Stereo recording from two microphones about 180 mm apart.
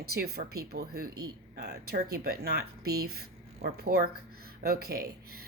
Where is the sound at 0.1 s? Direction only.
60° right (ahead or behind).